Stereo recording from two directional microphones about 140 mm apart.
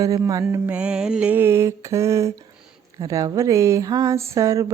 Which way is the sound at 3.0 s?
25° right (ahead or behind).